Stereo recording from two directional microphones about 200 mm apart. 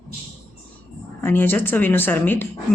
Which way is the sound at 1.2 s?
10° left (ahead or behind).